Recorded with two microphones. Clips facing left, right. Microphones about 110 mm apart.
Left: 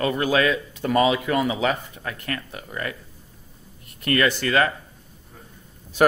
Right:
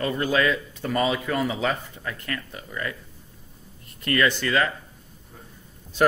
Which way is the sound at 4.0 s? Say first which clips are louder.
Left 1 dB; 60° left (ahead or behind).